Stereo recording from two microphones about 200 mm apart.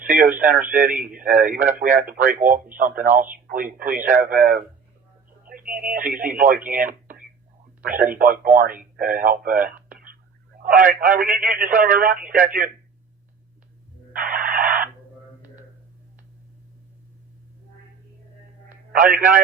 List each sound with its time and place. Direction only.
0.1 s speech: 45° right (ahead or behind)
14.1 s radio: 45° right (ahead or behind)
18.9 s speech: 45° right (ahead or behind)